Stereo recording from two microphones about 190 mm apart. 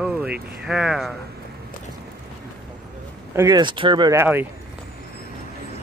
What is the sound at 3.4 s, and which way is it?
Speech, 20° right (ahead or behind).